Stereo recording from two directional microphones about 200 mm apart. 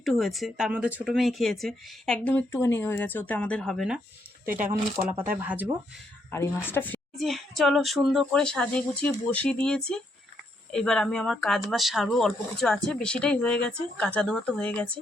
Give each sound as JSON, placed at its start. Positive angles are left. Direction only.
{"t": 0.0, "sound": "speech", "side_deg": 0}
{"t": 4.5, "sound": "speech", "side_deg": -40}
{"t": 5.4, "sound": "speech", "side_deg": -10}
{"t": 6.3, "sound": "speech", "side_deg": 10}